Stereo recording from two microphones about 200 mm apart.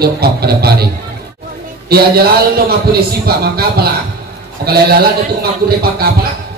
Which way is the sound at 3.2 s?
50° right (ahead or behind).